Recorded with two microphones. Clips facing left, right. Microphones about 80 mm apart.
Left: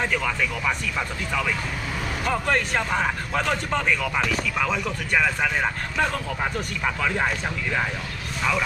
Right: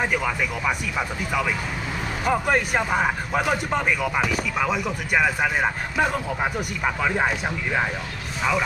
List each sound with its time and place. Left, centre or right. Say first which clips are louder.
0.0 s a man's voice: right 1 dB; centre